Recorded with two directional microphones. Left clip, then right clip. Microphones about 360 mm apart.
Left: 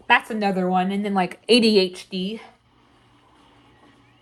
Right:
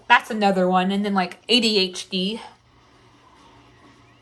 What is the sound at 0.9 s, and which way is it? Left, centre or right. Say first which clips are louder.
Speech: even; centre.